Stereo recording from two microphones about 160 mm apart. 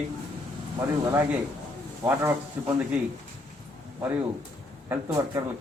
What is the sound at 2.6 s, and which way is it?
Speech, 10° right (ahead or behind).